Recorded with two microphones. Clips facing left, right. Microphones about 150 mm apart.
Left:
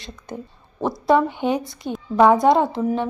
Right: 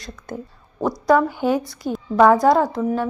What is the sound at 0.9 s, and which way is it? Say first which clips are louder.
Speech: right 1 dB; 25° left (ahead or behind).